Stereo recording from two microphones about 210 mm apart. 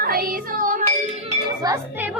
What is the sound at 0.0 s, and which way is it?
Music, 45° right (ahead or behind).